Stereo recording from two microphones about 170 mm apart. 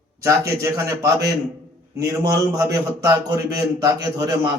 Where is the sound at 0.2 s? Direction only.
15° right (ahead or behind).